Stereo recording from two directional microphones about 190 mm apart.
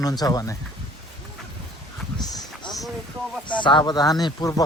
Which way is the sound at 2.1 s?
25° left (ahead or behind).